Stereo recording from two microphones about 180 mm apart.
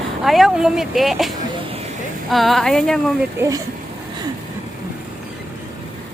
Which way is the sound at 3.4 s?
20° right (ahead or behind).